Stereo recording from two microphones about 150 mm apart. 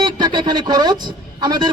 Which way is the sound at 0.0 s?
30° right (ahead or behind).